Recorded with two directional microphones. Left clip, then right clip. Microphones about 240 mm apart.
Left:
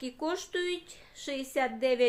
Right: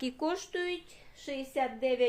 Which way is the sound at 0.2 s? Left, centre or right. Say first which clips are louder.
Left 1 dB; centre.